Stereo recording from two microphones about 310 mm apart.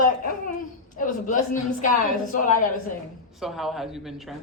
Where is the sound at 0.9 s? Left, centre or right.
Left.